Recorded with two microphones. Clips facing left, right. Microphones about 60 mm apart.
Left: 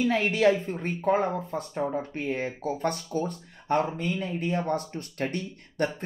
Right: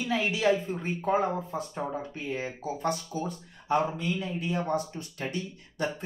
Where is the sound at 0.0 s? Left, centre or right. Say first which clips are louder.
Left 5 dB; left.